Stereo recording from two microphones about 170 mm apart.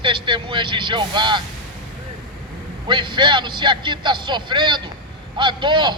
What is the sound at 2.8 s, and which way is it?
A man's voice, 25° right (ahead or behind).